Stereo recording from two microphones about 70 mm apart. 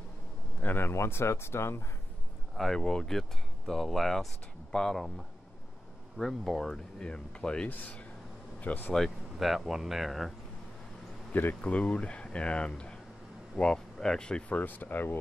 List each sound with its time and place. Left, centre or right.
0.6 s speech: left
2.5 s speech: centre; by 8.9 s left
8.9 s speech: centre
11.6 s speech: centre
14.6 s speech: left